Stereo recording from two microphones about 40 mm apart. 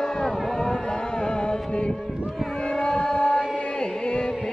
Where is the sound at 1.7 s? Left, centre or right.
Left.